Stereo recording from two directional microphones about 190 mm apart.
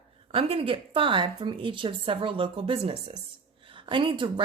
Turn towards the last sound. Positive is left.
turn(degrees=-25)  # may be behind; listen again after turning